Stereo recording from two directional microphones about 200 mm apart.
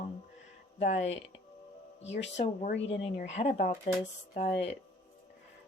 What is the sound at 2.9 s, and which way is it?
Speech, 35° left (ahead or behind).